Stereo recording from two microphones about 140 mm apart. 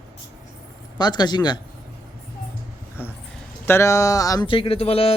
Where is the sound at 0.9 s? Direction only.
30° left (ahead or behind).